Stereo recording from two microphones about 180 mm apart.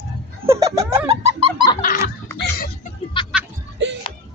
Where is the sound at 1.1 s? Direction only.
35° right (ahead or behind).